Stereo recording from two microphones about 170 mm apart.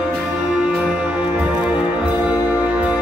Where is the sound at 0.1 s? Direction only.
5° right (ahead or behind).